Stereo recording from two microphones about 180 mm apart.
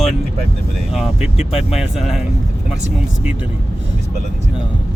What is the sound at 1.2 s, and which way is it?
Speech, 35° left (ahead or behind).